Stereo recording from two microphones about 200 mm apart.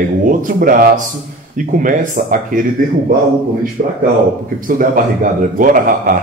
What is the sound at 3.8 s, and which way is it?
A man's voice, 45° right (ahead or behind).